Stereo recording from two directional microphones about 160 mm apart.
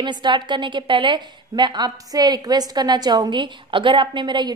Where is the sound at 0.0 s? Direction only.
30° right (ahead or behind).